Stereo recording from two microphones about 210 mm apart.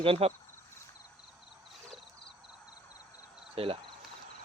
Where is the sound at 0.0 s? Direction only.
25° right (ahead or behind).